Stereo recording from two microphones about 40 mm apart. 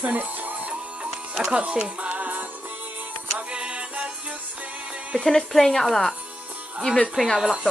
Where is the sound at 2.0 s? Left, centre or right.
Right.